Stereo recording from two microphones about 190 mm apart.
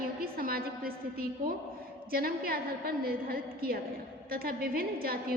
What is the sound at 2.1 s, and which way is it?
A woman's voice, 50° right (ahead or behind).